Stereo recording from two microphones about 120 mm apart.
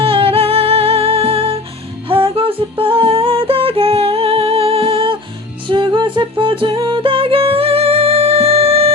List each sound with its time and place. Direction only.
0.0 s music: 50° right (ahead or behind)
2.0 s humming: 45° right (ahead or behind)
5.6 s music: 40° right (ahead or behind)